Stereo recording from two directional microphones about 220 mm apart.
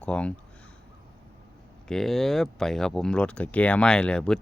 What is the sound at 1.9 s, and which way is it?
Speech, centre (ahead or behind).